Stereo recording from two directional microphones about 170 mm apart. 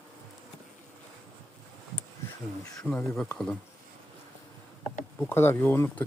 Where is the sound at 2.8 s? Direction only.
10° left (ahead or behind).